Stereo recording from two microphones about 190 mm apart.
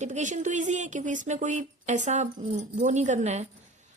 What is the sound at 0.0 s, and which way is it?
A woman's voice, 40° right (ahead or behind).